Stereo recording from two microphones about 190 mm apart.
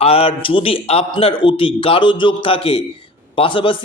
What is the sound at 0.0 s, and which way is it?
A man's voice, 30° left (ahead or behind).